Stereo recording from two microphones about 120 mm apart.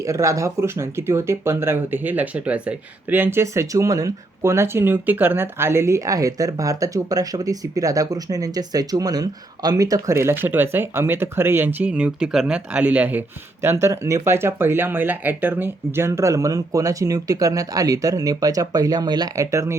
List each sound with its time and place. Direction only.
0.0 s speech: 25° right (ahead or behind)